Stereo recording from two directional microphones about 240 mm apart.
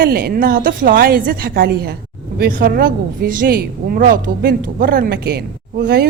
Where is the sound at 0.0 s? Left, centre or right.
Right.